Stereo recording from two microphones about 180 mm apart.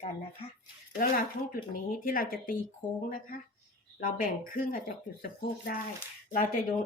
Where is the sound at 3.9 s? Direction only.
50° left (ahead or behind).